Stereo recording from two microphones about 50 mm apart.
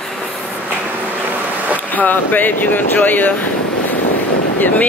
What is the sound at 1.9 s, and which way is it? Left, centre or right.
Speech, left.